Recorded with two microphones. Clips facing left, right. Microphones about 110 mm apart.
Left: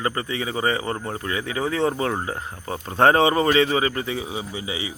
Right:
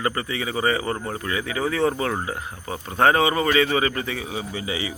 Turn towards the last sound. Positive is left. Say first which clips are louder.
# right 2 dB
turn(degrees=15)  # may be behind; listen again after turning